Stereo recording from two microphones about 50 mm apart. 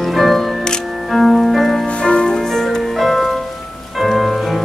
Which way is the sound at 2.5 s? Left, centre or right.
Centre.